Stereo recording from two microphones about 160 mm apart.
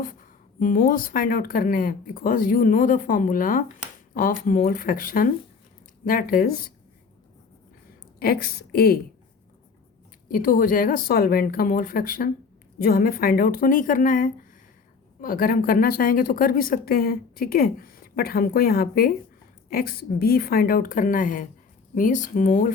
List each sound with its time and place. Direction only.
0.6 s a woman's voice: 60° left (ahead or behind)
8.2 s a woman's voice: 70° left (ahead or behind)
10.2 s a woman's voice: 60° left (ahead or behind)